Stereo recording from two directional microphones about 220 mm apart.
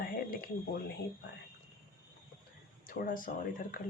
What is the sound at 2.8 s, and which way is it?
Speech, 40° left (ahead or behind).